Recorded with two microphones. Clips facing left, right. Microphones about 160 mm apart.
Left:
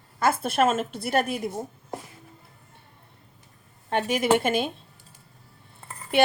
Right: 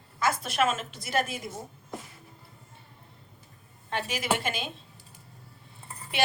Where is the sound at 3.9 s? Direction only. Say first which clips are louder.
Left 8 dB; 50° left (ahead or behind).